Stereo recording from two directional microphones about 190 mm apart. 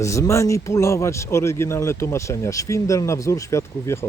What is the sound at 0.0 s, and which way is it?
Speech, 15° left (ahead or behind).